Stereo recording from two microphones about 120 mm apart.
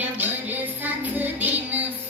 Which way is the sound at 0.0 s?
15° right (ahead or behind).